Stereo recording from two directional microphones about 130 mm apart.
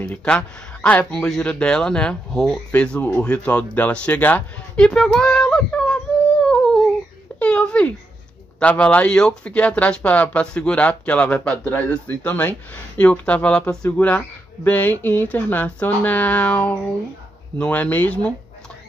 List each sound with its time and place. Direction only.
0.0 s speech: 10° left (ahead or behind)
6.4 s a sound: 5° left (ahead or behind)
8.5 s speech: 10° left (ahead or behind)